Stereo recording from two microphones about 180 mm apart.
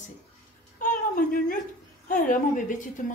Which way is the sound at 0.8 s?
50° left (ahead or behind).